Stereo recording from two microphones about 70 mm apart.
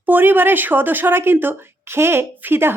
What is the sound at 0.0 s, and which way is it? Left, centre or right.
Speech, right.